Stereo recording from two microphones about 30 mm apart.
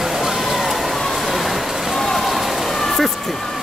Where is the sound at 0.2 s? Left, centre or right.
Centre.